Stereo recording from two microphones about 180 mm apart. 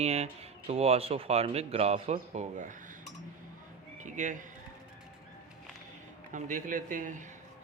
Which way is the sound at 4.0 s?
45° right (ahead or behind).